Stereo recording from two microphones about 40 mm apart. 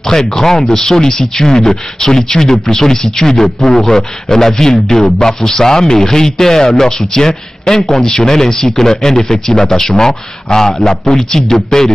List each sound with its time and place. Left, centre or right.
0.0 s speech: centre